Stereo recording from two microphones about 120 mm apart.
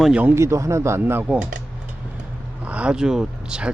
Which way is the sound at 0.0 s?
10° right (ahead or behind).